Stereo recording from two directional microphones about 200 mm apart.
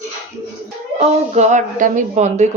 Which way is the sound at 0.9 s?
35° right (ahead or behind).